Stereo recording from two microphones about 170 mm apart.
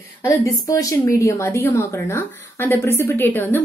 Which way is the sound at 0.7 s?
20° left (ahead or behind).